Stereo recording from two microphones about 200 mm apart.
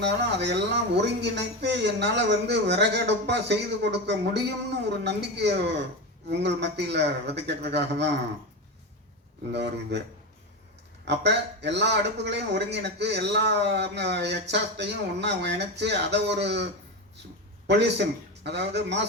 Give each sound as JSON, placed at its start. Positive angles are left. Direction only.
{"t": 0.0, "sound": "a man's voice", "side_deg": -60}
{"t": 9.5, "sound": "a man's voice", "side_deg": -60}
{"t": 11.0, "sound": "a man's voice", "side_deg": -60}
{"t": 17.7, "sound": "a man's voice", "side_deg": -60}